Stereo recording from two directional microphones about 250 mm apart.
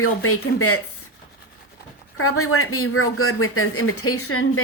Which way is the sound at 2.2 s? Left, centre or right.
Left.